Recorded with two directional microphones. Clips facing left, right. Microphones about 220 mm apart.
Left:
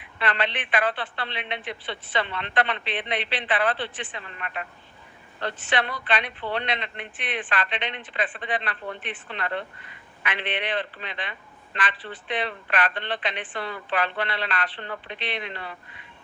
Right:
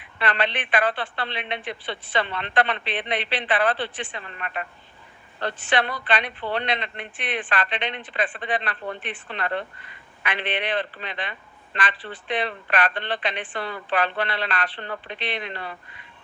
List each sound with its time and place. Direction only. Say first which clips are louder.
0.2 s speech: right 2 dB; 40° right (ahead or behind)
5.7 s speech: right 2 dB; 40° right (ahead or behind)